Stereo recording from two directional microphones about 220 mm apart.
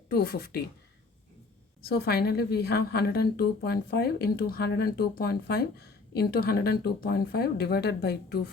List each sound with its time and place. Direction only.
0.1 s a woman's voice: 45° left (ahead or behind)
1.8 s a woman's voice: 45° left (ahead or behind)